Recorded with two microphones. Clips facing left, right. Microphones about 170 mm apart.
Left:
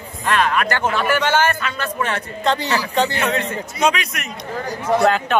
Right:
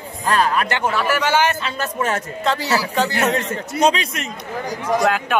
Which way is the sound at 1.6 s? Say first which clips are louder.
Right 1 dB; 40° right (ahead or behind).